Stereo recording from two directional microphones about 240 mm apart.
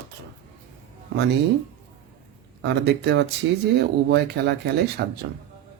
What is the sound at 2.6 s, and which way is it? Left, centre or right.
Speech, right.